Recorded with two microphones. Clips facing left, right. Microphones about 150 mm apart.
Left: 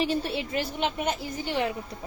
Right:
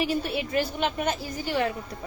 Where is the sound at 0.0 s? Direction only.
30° left (ahead or behind).